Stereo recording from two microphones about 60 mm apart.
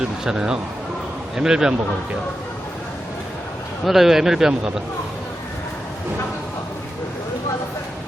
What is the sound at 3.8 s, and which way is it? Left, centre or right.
A man's voice, centre.